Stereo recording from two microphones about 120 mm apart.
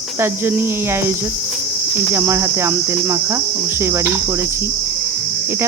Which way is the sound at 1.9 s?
20° right (ahead or behind).